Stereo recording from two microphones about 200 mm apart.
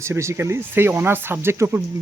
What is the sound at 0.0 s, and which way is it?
Speech, 15° right (ahead or behind).